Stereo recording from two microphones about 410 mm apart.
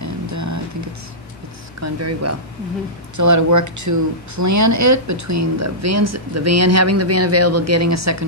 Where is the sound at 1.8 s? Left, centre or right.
Right.